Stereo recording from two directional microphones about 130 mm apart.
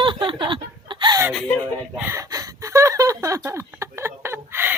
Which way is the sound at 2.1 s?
25° right (ahead or behind).